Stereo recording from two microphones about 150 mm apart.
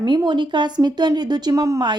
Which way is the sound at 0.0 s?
30° right (ahead or behind).